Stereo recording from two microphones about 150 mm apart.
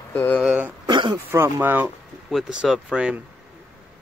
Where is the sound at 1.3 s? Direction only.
15° right (ahead or behind).